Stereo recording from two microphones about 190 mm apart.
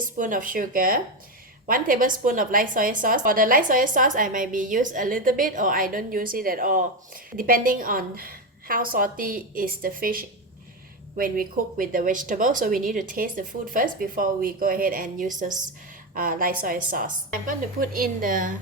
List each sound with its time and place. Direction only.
0.2 s a woman's voice: 45° right (ahead or behind)